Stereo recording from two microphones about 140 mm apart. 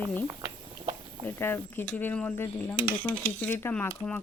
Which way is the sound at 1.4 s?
15° left (ahead or behind).